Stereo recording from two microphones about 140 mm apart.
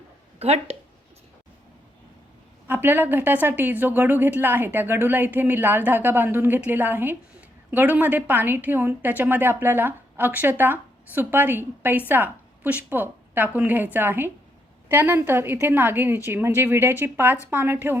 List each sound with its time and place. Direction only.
0.3 s speech: 45° right (ahead or behind)
2.6 s a woman's voice: 15° right (ahead or behind)